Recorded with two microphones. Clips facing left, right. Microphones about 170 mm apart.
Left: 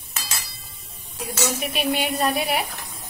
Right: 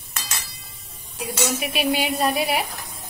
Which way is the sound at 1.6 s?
5° right (ahead or behind).